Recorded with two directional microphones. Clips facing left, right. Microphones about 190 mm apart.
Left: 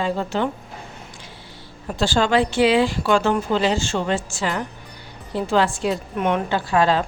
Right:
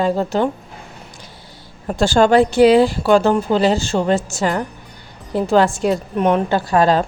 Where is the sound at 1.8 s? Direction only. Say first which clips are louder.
Right 6 dB; 50° right (ahead or behind).